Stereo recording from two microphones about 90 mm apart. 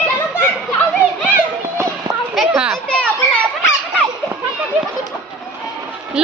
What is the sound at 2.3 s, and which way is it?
Children playing, 10° right (ahead or behind).